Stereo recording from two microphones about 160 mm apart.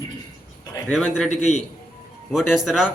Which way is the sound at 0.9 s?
5° left (ahead or behind).